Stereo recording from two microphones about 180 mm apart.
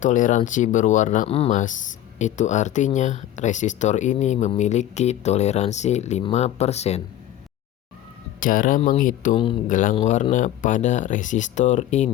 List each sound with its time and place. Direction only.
0.0 s speech: 45° left (ahead or behind)
1.3 s speech: 35° left (ahead or behind)
8.4 s speech: 50° left (ahead or behind)
9.3 s speech: 30° left (ahead or behind)
9.6 s speech: 45° left (ahead or behind)